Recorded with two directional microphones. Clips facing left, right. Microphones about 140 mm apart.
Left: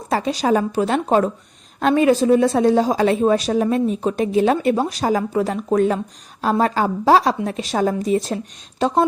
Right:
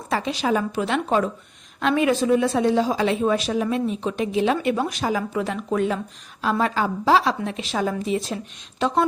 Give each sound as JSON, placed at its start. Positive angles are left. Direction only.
{"t": 0.1, "sound": "a woman's voice", "side_deg": 40}